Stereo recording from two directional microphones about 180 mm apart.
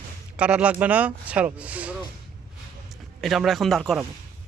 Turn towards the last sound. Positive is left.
turn(degrees=0)  # may be behind; listen again after turning